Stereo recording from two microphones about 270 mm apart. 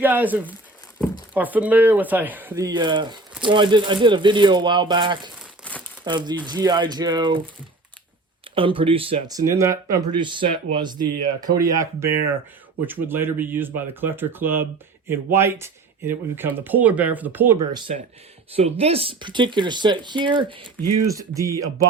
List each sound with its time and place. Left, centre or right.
0.0 s speech: centre
8.5 s speech: centre
20.8 s speech: right
21.1 s speech: centre